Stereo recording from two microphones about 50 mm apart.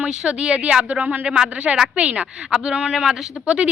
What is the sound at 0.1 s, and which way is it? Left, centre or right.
Speech, centre.